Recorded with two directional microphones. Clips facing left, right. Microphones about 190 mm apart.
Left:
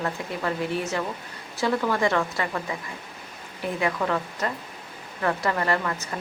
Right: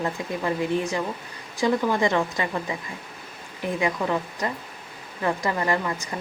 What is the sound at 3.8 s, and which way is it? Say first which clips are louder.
Speech: even; 15° right (ahead or behind).